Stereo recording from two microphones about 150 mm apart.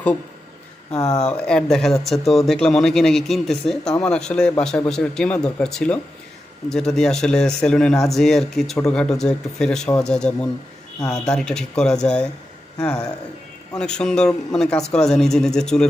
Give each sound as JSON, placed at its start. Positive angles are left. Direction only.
{"t": 0.9, "sound": "speech", "side_deg": 25}
{"t": 1.3, "sound": "speech", "side_deg": 5}